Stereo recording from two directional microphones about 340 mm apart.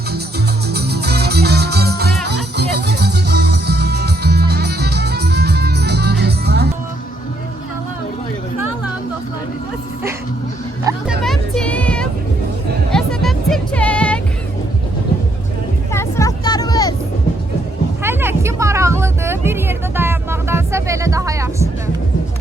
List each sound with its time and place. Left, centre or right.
0.7 s music: right
10.8 s music: centre
15.9 s vehicle: centre
18.0 s music: centre